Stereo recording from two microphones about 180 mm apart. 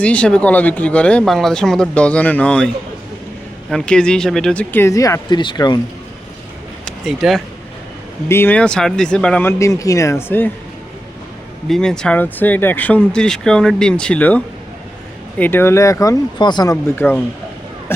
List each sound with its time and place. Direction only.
0.0 s speech: 5° left (ahead or behind)
3.7 s speech: 5° left (ahead or behind); by 5.8 s 25° left (ahead or behind)
6.8 s speech: centre (ahead or behind)
8.3 s speech: 10° left (ahead or behind)
11.7 s speech: 5° left (ahead or behind); by 16.7 s 25° left (ahead or behind)
16.9 s speech: 10° left (ahead or behind)